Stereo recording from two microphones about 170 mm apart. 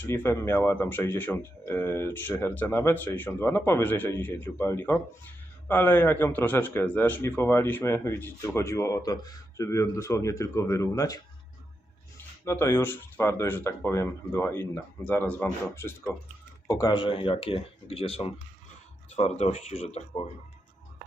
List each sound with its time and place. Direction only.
0.1 s speech: 15° left (ahead or behind); by 20.3 s 40° left (ahead or behind)